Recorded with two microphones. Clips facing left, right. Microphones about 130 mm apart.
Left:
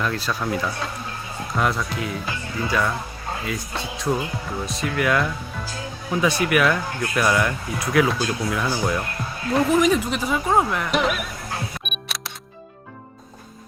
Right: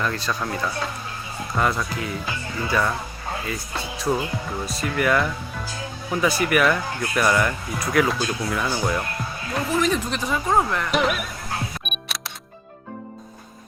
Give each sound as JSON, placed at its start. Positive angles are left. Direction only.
{"t": 0.0, "sound": "speech", "side_deg": 0}
{"t": 9.6, "sound": "speech", "side_deg": 15}
{"t": 11.9, "sound": "music", "side_deg": 0}